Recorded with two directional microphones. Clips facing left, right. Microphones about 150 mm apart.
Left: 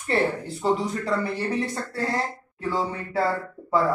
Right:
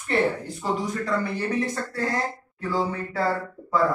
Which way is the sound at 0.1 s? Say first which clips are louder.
Even; 30° left (ahead or behind).